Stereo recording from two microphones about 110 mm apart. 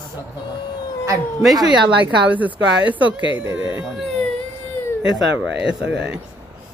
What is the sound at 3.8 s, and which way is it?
Speech, centre (ahead or behind).